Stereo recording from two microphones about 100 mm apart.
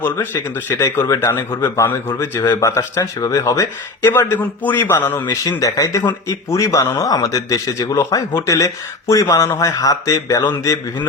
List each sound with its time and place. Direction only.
0.0 s speech: 20° left (ahead or behind)
5.5 s speech: 35° left (ahead or behind)